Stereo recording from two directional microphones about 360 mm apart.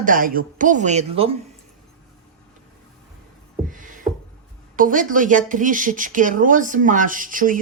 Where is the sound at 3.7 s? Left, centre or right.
Right.